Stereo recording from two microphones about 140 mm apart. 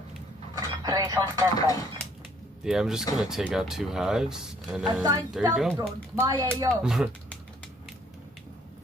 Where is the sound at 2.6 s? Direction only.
5° right (ahead or behind).